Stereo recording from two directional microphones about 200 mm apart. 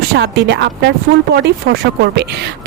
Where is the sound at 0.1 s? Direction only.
55° right (ahead or behind).